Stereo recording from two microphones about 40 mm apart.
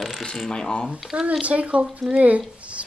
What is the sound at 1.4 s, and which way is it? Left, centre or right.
Speech, right.